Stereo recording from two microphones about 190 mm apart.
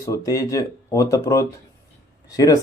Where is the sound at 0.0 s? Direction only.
15° left (ahead or behind).